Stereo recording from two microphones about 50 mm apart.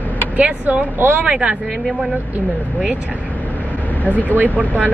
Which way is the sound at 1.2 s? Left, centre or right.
Centre.